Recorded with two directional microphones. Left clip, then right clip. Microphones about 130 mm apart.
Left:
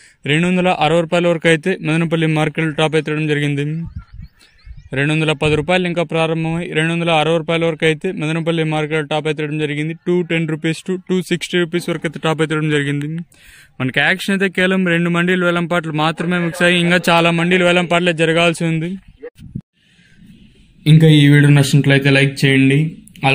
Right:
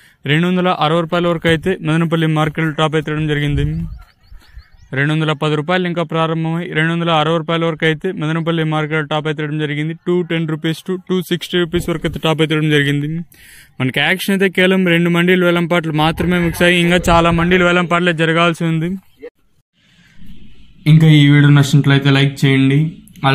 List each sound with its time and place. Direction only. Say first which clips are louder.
0.2 s a man's voice: even; 35° left (ahead or behind)
4.9 s a man's voice: even; 50° left (ahead or behind)
11.8 s speech: right 1 dB; 20° left (ahead or behind); by 16.8 s 5° left (ahead or behind)
17.0 s a man's voice: right 1 dB; 40° left (ahead or behind)
20.9 s speech: left 1 dB; 15° left (ahead or behind)